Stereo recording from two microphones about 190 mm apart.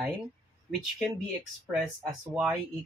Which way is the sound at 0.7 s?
Centre (ahead or behind).